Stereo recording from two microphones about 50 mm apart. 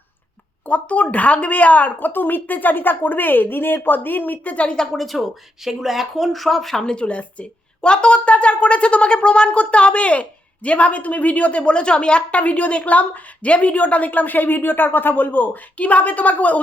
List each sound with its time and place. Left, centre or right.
0.6 s a woman's voice: left
4.9 s speech: centre
6.9 s speech: left